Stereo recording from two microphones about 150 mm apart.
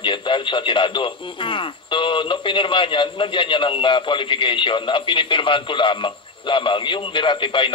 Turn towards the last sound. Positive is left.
turn(degrees=35)  # may be behind; listen again after turning